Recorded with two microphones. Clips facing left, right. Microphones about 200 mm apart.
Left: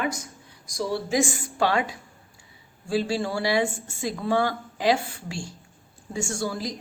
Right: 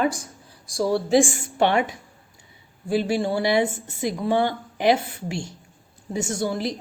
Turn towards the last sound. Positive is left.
turn(degrees=-25)  # may be behind; listen again after turning